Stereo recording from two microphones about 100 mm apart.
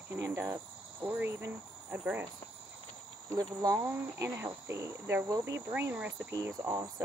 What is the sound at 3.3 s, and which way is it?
Cricket, 35° right (ahead or behind).